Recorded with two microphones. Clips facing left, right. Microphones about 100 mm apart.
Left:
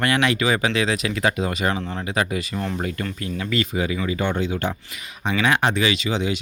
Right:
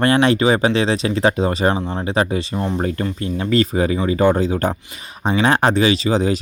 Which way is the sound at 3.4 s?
40° right (ahead or behind).